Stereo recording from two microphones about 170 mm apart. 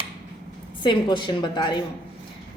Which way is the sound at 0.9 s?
25° left (ahead or behind).